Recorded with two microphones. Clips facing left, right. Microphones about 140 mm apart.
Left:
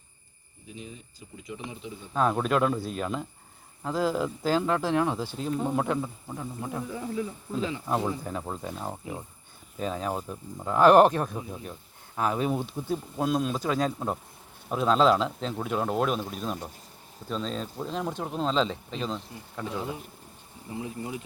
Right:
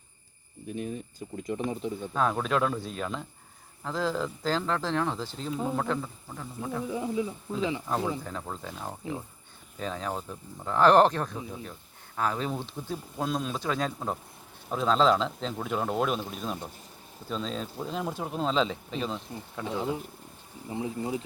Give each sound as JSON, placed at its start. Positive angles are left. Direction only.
{"t": 0.7, "sound": "speech", "side_deg": -55}
{"t": 2.1, "sound": "speech", "side_deg": 5}
{"t": 5.5, "sound": "speech", "side_deg": -5}
{"t": 5.7, "sound": "speech", "side_deg": 15}
{"t": 6.9, "sound": "speech", "side_deg": -20}
{"t": 7.9, "sound": "speech", "side_deg": 15}
{"t": 19.6, "sound": "speech", "side_deg": -15}